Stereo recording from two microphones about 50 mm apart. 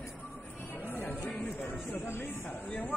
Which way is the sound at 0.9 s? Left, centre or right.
Left.